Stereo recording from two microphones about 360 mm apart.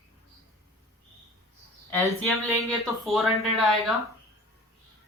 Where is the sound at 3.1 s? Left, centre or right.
Centre.